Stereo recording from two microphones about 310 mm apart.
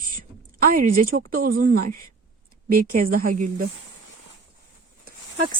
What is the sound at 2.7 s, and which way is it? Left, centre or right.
Speech, right.